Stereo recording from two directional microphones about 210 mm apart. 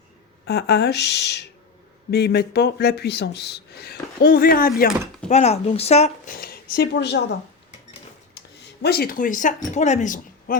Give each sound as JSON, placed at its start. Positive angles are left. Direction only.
{"t": 0.4, "sound": "speech", "side_deg": 50}
{"t": 5.3, "sound": "speech", "side_deg": 30}
{"t": 6.3, "sound": "a woman's voice", "side_deg": 45}
{"t": 8.4, "sound": "speech", "side_deg": 50}